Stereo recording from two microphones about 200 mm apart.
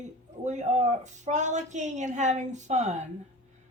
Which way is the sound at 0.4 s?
35° right (ahead or behind).